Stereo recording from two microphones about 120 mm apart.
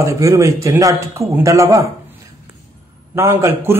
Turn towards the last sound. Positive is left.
turn(degrees=-20)  # may be behind; listen again after turning